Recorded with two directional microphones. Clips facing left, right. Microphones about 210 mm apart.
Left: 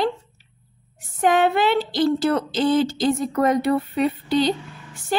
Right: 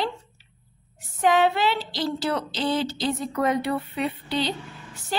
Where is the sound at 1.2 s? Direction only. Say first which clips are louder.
Left 2 dB; 50° left (ahead or behind).